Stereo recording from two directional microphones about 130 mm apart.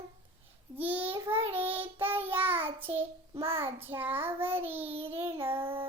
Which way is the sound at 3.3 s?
45° right (ahead or behind).